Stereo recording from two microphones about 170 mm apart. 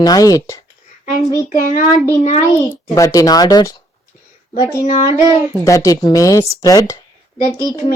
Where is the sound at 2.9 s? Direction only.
20° left (ahead or behind).